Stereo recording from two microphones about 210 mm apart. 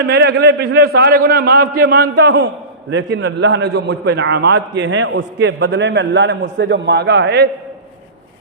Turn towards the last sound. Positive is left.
turn(degrees=-55)  # may be behind; listen again after turning